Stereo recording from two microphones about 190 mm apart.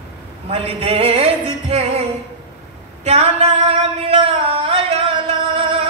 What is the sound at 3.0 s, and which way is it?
Singing, 35° right (ahead or behind).